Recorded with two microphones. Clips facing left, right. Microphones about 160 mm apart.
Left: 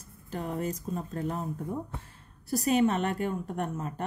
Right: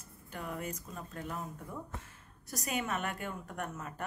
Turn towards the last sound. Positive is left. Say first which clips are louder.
# left 8 dB
turn(degrees=30)  # may be behind; listen again after turning